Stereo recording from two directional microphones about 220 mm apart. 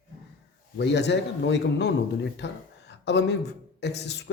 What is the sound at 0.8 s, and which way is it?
Speech, 50° left (ahead or behind).